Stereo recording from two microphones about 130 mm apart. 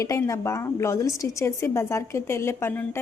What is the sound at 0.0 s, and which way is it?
A woman's voice, 25° left (ahead or behind).